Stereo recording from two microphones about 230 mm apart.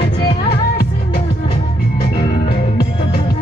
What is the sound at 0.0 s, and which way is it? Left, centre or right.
Music, left.